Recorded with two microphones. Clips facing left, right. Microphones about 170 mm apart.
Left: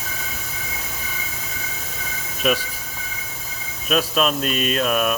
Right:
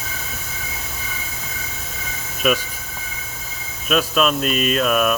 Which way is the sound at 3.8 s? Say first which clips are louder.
Right 2 dB; 40° left (ahead or behind).